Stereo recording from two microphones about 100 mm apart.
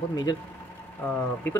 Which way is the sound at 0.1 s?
40° left (ahead or behind).